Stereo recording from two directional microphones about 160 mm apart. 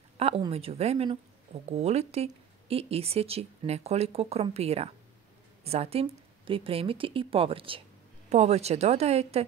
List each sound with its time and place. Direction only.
0.5 s speech: 40° right (ahead or behind)
8.3 s speech: 45° right (ahead or behind)